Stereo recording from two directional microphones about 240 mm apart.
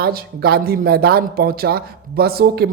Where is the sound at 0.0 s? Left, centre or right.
Right.